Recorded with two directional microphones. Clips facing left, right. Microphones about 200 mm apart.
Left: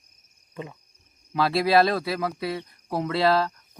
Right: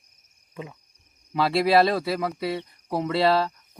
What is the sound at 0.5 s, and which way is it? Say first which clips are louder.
Frog: left 1 dB; centre (ahead or behind).